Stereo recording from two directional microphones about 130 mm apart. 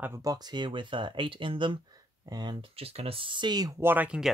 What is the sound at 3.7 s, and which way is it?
Speech, 15° right (ahead or behind).